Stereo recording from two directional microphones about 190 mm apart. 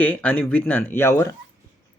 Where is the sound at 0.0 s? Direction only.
10° left (ahead or behind).